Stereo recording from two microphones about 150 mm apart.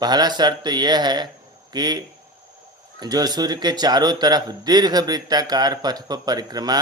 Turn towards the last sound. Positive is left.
turn(degrees=-25)  # may be behind; listen again after turning